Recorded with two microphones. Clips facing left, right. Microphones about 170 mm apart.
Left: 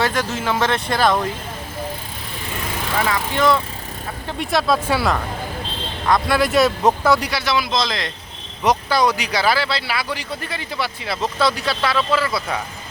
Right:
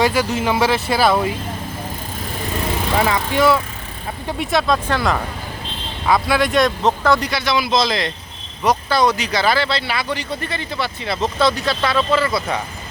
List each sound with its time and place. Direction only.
0.0 s speech: 10° right (ahead or behind)
2.9 s speech: 25° right (ahead or behind)
3.3 s a man's voice: 10° right (ahead or behind)
8.9 s speech: 10° left (ahead or behind)